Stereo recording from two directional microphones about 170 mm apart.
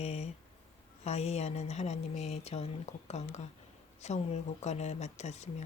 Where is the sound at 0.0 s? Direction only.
40° left (ahead or behind).